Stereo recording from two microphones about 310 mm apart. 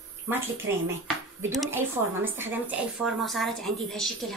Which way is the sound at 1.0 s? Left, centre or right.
Centre.